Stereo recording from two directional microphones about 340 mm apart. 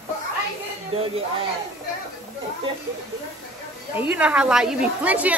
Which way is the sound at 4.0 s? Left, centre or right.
Centre.